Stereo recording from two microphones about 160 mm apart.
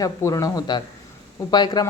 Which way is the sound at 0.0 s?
20° left (ahead or behind).